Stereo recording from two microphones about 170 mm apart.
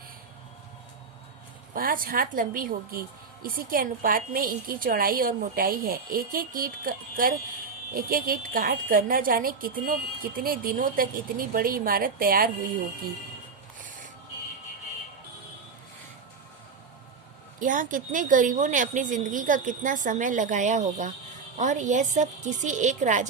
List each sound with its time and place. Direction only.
1.7 s speech: 55° right (ahead or behind)
17.6 s a woman's voice: 50° right (ahead or behind)